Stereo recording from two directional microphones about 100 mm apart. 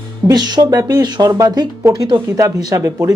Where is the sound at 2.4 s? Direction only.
30° right (ahead or behind).